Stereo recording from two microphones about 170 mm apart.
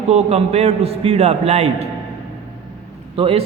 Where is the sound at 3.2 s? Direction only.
35° right (ahead or behind).